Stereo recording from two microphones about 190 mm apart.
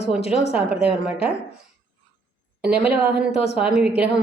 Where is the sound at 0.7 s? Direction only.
30° left (ahead or behind).